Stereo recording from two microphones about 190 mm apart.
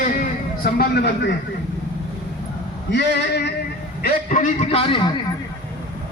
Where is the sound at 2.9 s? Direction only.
65° left (ahead or behind).